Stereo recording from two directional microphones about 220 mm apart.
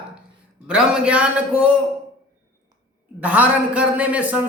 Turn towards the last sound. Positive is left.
turn(degrees=-5)  # may be behind; listen again after turning